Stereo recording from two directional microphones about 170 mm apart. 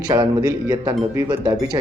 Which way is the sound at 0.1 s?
20° right (ahead or behind).